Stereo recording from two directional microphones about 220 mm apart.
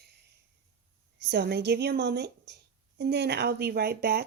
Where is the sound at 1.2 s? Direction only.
50° right (ahead or behind).